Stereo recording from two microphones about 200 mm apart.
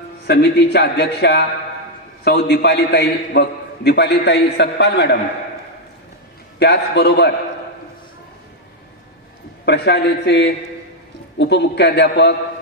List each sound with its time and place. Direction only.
0.3 s a man's voice: 60° left (ahead or behind)
6.6 s a man's voice: 55° left (ahead or behind)
9.7 s a man's voice: 60° left (ahead or behind)